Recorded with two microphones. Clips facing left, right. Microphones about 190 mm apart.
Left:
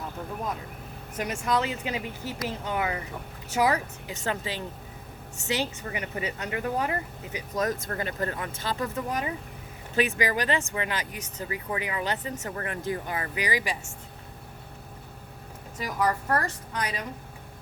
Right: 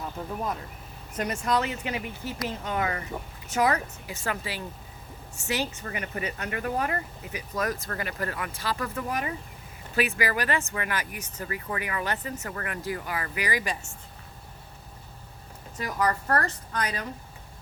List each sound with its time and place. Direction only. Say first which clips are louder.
1.1 s speech: right 1 dB; 5° left (ahead or behind)
1.6 s a woman's voice: left 1 dB; 15° left (ahead or behind)
15.8 s a woman's voice: even; 5° left (ahead or behind)